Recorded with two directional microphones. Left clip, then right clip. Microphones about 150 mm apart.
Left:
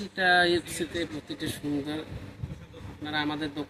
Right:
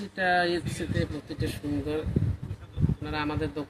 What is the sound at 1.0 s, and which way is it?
Speech, 25° right (ahead or behind).